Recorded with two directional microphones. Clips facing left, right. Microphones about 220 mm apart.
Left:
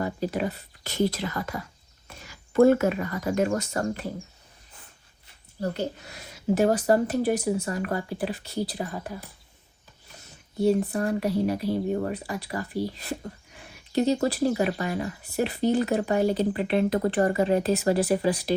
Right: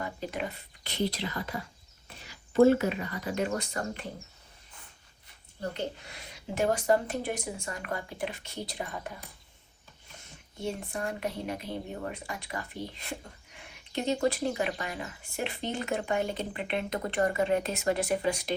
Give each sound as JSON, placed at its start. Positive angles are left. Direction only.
{"t": 0.0, "sound": "speech", "side_deg": 40}
{"t": 5.5, "sound": "speech", "side_deg": 40}
{"t": 10.6, "sound": "speech", "side_deg": 35}